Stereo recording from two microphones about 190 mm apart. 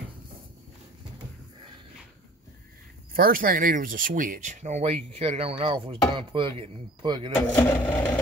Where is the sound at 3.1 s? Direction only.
50° right (ahead or behind); by 7.3 s 25° right (ahead or behind).